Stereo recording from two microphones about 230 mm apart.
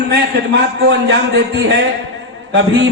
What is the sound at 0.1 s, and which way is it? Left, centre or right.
A man's voice, right.